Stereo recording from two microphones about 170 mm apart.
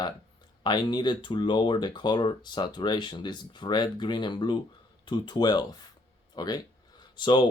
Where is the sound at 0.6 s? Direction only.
25° left (ahead or behind).